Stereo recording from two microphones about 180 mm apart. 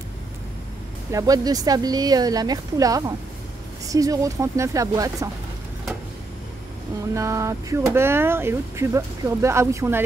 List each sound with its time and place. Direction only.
1.1 s speech: 20° right (ahead or behind)
7.2 s speech: 15° right (ahead or behind)